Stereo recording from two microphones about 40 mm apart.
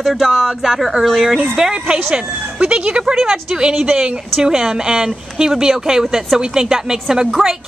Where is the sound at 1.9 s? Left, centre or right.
Right.